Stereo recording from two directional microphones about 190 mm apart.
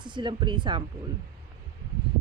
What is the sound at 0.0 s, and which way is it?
Speech, 25° right (ahead or behind).